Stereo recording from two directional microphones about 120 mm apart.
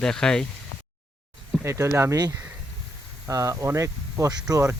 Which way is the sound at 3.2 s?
25° right (ahead or behind).